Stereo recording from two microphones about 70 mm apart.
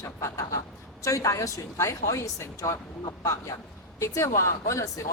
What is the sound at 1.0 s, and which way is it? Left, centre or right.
Speech, left.